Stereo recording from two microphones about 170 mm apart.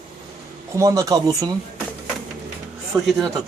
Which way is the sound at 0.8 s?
20° right (ahead or behind).